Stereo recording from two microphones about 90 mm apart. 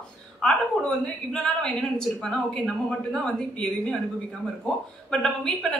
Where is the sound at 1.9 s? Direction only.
10° left (ahead or behind).